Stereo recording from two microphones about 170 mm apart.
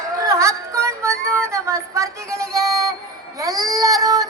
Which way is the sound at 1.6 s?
15° right (ahead or behind).